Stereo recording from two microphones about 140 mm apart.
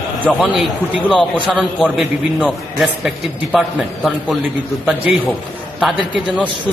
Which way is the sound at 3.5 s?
Centre (ahead or behind).